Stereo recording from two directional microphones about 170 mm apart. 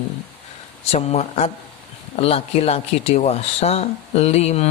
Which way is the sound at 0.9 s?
40° left (ahead or behind).